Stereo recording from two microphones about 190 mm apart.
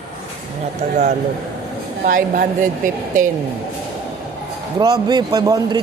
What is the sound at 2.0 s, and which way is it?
Speech, 45° right (ahead or behind).